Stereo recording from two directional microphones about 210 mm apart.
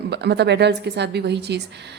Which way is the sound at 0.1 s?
55° right (ahead or behind).